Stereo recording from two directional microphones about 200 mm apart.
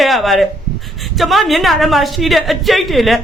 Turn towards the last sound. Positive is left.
turn(degrees=0)  # may be behind; listen again after turning